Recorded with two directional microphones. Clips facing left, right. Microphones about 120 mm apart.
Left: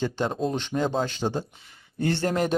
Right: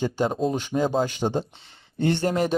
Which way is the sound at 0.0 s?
5° right (ahead or behind).